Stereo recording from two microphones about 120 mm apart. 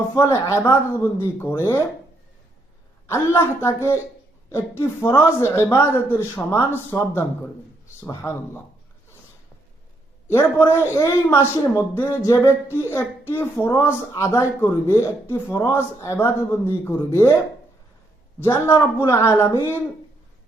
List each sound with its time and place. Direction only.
0.2 s a woman's voice: 25° left (ahead or behind)
3.1 s a woman's voice: 20° left (ahead or behind)
10.3 s a woman's voice: 20° left (ahead or behind)
18.3 s a woman's voice: 20° left (ahead or behind)